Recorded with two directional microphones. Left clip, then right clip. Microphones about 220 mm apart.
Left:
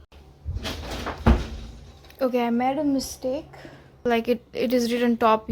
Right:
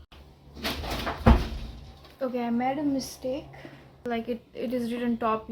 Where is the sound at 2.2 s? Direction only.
45° left (ahead or behind).